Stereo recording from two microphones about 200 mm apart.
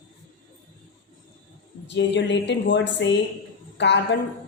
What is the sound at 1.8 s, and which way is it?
A woman's voice, 60° left (ahead or behind).